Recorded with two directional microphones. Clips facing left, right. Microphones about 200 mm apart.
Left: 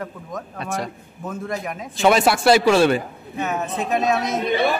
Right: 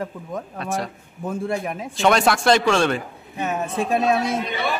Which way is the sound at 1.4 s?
30° right (ahead or behind).